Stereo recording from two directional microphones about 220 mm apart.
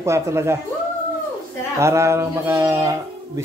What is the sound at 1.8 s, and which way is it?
Speech, 10° right (ahead or behind).